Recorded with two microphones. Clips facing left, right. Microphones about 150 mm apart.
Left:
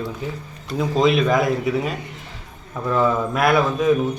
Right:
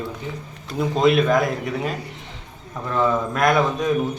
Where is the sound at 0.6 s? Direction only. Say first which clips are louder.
Even; centre (ahead or behind).